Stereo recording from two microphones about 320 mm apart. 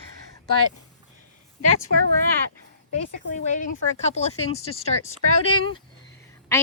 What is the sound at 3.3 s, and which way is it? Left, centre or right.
Speech, left.